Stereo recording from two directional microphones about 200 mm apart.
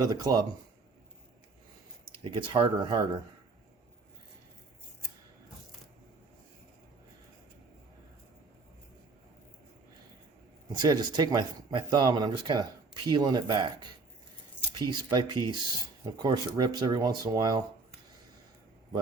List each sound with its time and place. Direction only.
0.0 s speech: 20° right (ahead or behind)
2.1 s speech: 25° right (ahead or behind)
10.7 s speech: 20° right (ahead or behind)